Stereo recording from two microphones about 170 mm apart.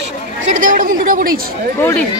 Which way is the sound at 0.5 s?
50° right (ahead or behind).